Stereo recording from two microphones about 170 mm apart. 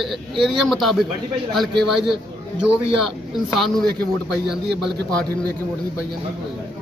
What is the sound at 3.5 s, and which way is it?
Speech, centre (ahead or behind).